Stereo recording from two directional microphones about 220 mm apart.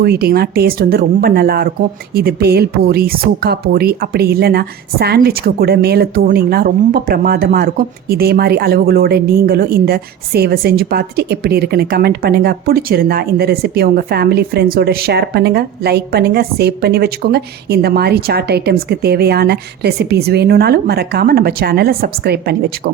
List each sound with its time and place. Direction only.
0.0 s speech: 45° right (ahead or behind)